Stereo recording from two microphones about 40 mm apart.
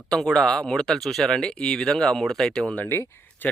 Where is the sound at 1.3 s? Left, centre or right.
Left.